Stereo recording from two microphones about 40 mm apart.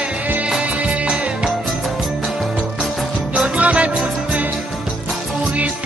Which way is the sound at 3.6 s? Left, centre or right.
Right.